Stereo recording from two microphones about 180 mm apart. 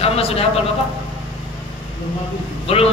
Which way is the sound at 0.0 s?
35° left (ahead or behind).